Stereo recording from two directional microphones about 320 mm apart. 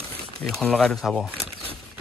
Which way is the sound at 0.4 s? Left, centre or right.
Centre.